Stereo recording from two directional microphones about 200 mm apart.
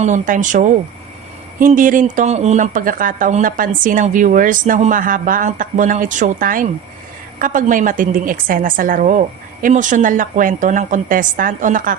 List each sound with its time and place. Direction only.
0.0 s speech: 40° right (ahead or behind)